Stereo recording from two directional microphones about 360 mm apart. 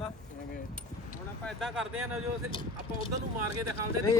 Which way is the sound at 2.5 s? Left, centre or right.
Centre.